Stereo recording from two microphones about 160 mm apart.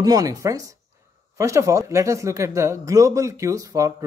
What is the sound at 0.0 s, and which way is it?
Speech, 20° right (ahead or behind).